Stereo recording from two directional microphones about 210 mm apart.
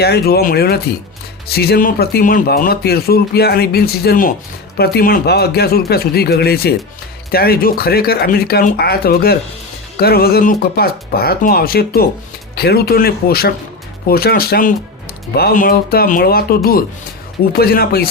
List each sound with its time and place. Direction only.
0.0 s speech: 50° left (ahead or behind)